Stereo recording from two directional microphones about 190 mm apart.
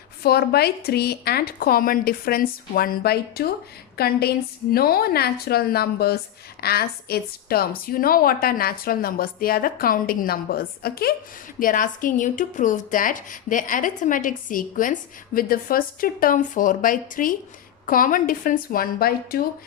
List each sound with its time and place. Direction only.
0.2 s a woman's voice: 55° left (ahead or behind)